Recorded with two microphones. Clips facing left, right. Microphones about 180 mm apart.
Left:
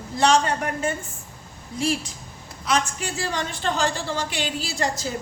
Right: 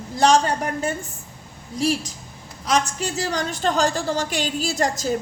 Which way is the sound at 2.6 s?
40° right (ahead or behind).